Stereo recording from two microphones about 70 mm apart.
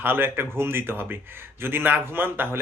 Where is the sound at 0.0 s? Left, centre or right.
Right.